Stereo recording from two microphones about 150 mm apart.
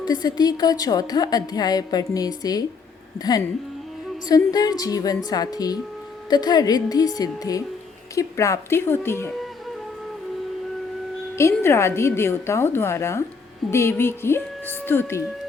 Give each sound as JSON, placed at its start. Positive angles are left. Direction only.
{"t": 0.0, "sound": "a woman's voice", "side_deg": 25}
{"t": 11.3, "sound": "a woman's voice", "side_deg": 15}